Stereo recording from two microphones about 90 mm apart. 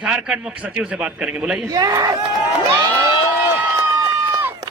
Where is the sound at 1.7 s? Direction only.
45° right (ahead or behind).